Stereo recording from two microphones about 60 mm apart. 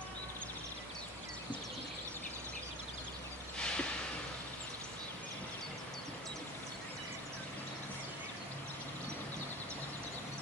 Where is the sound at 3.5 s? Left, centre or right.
Centre.